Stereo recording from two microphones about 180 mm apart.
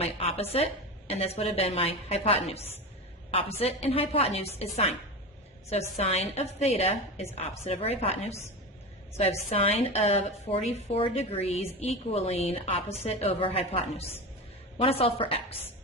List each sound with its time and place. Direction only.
0.0 s a woman's voice: 35° left (ahead or behind)
6.0 s a woman's voice: 35° left (ahead or behind)